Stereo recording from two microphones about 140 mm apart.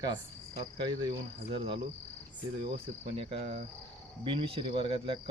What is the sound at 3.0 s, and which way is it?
Cricket, 45° right (ahead or behind).